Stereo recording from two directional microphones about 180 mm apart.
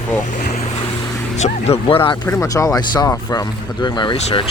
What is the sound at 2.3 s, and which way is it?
Speech, 15° left (ahead or behind).